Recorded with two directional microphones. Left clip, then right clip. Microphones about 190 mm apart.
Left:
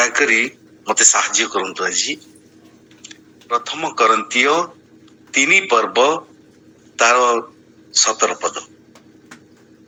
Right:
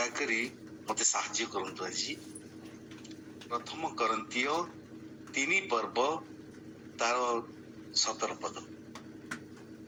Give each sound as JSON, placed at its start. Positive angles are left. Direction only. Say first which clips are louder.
{"t": 0.0, "sound": "a man's voice", "louder": "left 18 dB", "side_deg": 50}